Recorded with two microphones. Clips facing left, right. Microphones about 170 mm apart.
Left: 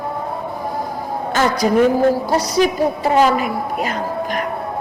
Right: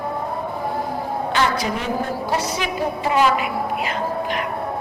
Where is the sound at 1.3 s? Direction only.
45° left (ahead or behind).